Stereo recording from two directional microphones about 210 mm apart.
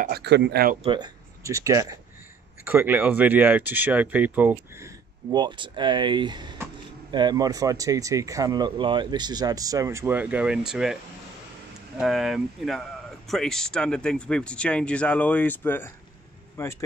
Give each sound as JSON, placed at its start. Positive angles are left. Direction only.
{"t": 0.0, "sound": "speech", "side_deg": -50}
{"t": 0.8, "sound": "speech", "side_deg": -20}
{"t": 12.0, "sound": "speech", "side_deg": 0}